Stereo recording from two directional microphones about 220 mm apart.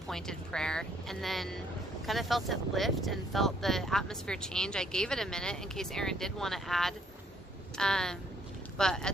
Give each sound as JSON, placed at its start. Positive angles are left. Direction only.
{"t": 0.1, "sound": "speech", "side_deg": 5}